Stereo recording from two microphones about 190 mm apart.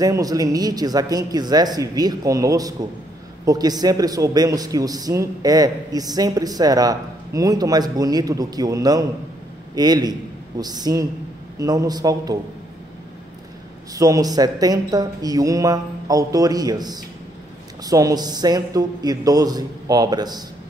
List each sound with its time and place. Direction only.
0.0 s a man's voice: 20° right (ahead or behind)
13.9 s a man's voice: 20° right (ahead or behind)